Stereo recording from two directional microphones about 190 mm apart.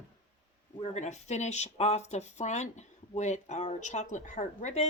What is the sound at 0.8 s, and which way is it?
Speech, 35° left (ahead or behind).